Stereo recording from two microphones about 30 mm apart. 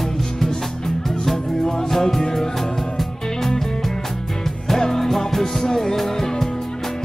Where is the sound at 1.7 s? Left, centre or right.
Centre.